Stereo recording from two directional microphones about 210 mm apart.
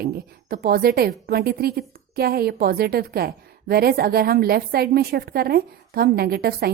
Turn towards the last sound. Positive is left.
turn(degrees=-50)  # may be behind; listen again after turning